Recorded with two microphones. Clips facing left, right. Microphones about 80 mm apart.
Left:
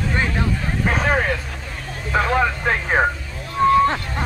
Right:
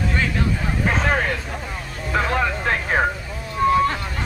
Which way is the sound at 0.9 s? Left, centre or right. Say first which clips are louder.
Left 1 dB; centre.